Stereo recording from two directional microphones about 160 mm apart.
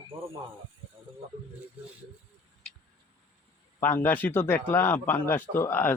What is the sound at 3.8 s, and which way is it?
Speech, 10° left (ahead or behind).